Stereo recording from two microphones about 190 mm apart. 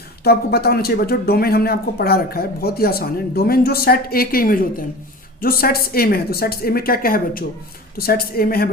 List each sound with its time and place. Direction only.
0.3 s speech: 55° left (ahead or behind)